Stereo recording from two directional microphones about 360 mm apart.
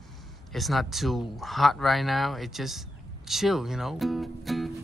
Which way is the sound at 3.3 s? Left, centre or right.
Centre.